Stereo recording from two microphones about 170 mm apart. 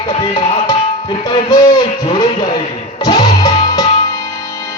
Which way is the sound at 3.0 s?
25° left (ahead or behind).